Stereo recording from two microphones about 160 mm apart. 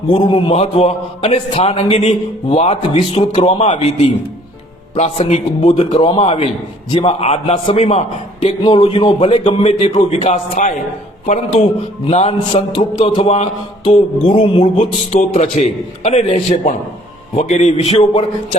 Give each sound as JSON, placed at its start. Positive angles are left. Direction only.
{"t": 0.1, "sound": "a man's voice", "side_deg": 35}
{"t": 4.9, "sound": "a man's voice", "side_deg": 45}
{"t": 12.0, "sound": "a man's voice", "side_deg": 40}